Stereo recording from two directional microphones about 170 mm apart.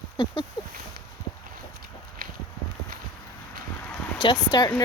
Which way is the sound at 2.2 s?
60° right (ahead or behind).